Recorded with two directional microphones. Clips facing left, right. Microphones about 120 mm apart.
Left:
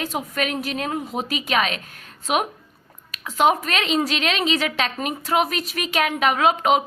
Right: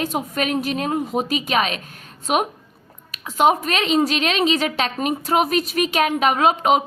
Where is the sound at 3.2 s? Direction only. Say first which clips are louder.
Right 2 dB; 20° right (ahead or behind).